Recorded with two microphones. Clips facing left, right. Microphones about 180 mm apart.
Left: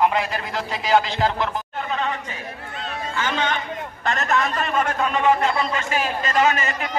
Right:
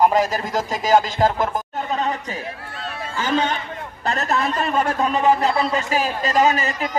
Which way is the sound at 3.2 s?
35° right (ahead or behind).